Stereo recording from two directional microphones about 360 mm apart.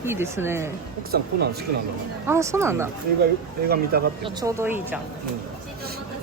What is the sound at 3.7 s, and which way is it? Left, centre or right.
Speech, right.